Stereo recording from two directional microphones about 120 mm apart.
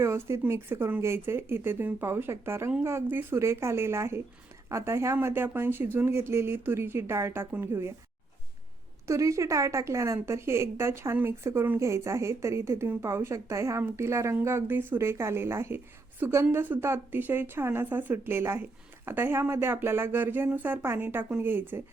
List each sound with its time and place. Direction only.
0.0 s a woman's voice: 25° right (ahead or behind)
9.0 s a woman's voice: 25° right (ahead or behind)